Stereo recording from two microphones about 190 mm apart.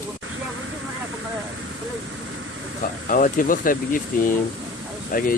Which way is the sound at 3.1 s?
45° left (ahead or behind).